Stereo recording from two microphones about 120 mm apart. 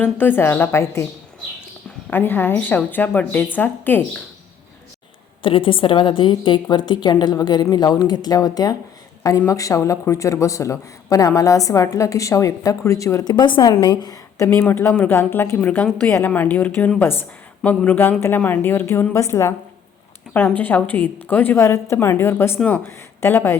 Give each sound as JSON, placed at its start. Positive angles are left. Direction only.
{"t": 0.0, "sound": "a woman's voice", "side_deg": 15}
{"t": 2.0, "sound": "a woman's voice", "side_deg": 15}
{"t": 5.4, "sound": "a woman's voice", "side_deg": 45}
{"t": 13.3, "sound": "a woman's voice", "side_deg": 40}
{"t": 20.6, "sound": "a woman's voice", "side_deg": 15}